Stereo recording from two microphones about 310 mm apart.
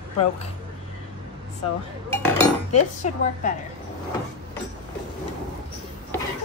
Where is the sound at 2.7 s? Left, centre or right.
Left.